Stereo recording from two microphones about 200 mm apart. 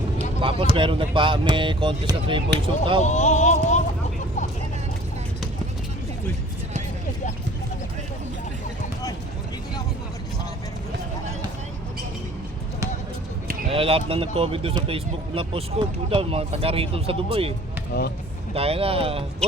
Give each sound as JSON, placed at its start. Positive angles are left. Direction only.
{"t": 0.2, "sound": "speech", "side_deg": -30}
{"t": 3.0, "sound": "speech", "side_deg": 35}
{"t": 13.7, "sound": "speech", "side_deg": -30}
{"t": 17.9, "sound": "speech", "side_deg": 45}
{"t": 18.5, "sound": "speech", "side_deg": -30}
{"t": 19.4, "sound": "speech", "side_deg": 5}